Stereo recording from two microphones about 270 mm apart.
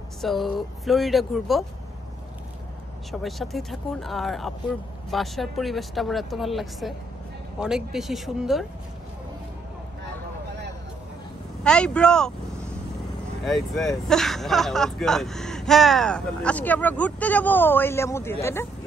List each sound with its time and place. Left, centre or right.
0.2 s speech: centre
3.1 s speech: centre
11.6 s speech: centre
13.4 s speech: centre